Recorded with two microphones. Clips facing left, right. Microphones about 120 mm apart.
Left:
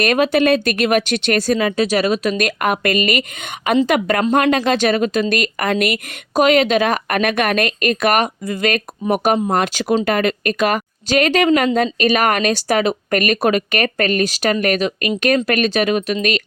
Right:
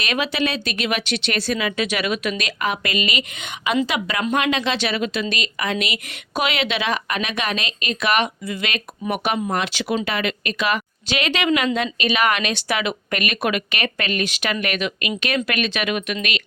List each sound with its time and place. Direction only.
0.0 s speech: 50° left (ahead or behind)
2.6 s speech: 55° left (ahead or behind); by 16.1 s 35° left (ahead or behind)